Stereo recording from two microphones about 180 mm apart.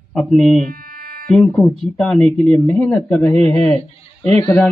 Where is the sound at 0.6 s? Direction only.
55° right (ahead or behind).